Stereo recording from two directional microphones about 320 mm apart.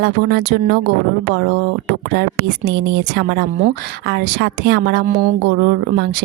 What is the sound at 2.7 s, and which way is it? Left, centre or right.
Speech, right.